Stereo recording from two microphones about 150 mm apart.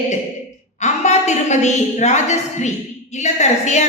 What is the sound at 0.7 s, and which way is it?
A woman's voice, 50° left (ahead or behind).